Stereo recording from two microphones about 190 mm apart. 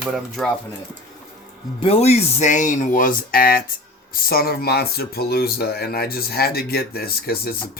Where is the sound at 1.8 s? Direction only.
35° left (ahead or behind).